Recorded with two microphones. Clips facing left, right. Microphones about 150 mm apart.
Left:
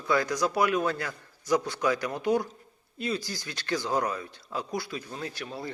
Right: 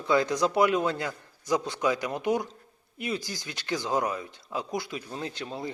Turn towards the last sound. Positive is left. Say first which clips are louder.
# right 2 dB
turn(degrees=-20)  # may be behind; listen again after turning